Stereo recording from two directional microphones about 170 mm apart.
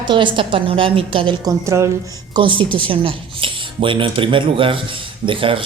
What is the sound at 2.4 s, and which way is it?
Speech, 30° right (ahead or behind).